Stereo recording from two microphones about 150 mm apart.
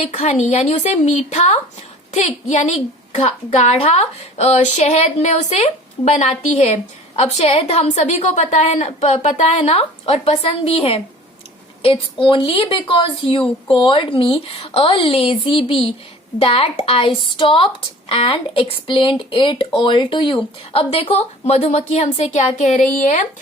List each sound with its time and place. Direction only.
0.1 s a woman's voice: 50° left (ahead or behind)